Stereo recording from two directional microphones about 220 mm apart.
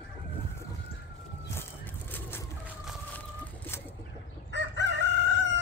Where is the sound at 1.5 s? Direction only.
10° left (ahead or behind).